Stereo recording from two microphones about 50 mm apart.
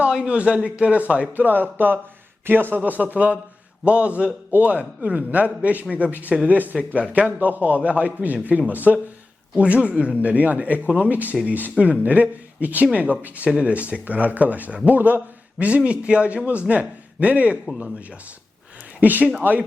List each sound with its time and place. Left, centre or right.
0.3 s speech: right
1.5 s a man's voice: right
3.0 s a man's voice: right
6.7 s speech: right
7.3 s a man's voice: right
18.9 s a man's voice: right